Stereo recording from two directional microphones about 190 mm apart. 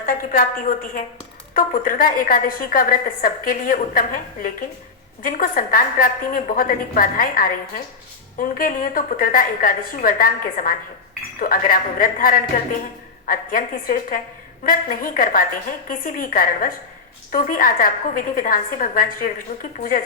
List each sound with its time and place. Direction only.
0.0 s a woman's voice: 45° left (ahead or behind)